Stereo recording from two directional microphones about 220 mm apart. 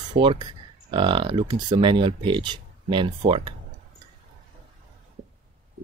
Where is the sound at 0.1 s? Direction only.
20° right (ahead or behind).